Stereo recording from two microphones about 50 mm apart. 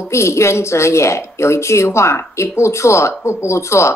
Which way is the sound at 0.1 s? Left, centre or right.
Left.